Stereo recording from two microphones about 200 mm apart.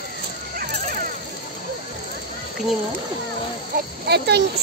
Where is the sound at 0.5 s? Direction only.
45° right (ahead or behind).